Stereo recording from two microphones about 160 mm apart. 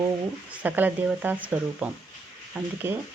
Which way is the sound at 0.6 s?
10° right (ahead or behind).